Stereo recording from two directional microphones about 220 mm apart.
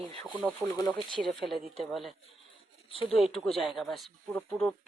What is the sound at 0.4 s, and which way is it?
Speech, 15° left (ahead or behind).